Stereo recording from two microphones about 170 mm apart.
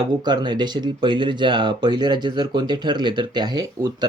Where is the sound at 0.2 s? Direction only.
25° right (ahead or behind).